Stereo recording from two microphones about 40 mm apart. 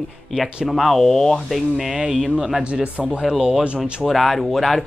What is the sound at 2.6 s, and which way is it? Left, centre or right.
Speech, right.